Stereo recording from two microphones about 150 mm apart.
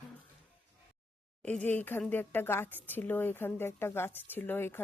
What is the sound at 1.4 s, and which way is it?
Speech, 10° left (ahead or behind).